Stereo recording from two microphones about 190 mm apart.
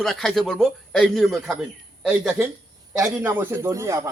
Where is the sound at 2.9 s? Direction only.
15° right (ahead or behind).